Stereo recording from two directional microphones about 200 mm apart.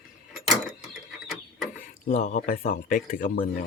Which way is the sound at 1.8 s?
40° left (ahead or behind).